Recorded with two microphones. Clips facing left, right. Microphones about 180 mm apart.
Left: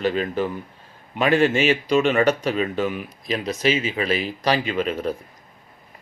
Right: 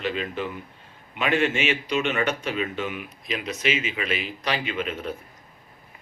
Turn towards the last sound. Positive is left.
turn(degrees=40)  # may be behind; listen again after turning